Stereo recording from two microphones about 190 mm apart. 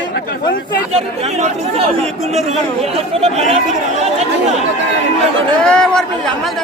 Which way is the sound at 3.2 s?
35° right (ahead or behind).